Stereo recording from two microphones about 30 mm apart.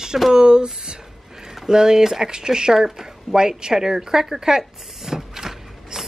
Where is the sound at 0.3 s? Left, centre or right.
Right.